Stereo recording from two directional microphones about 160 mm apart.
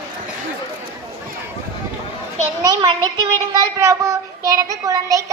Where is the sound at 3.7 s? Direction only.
20° right (ahead or behind).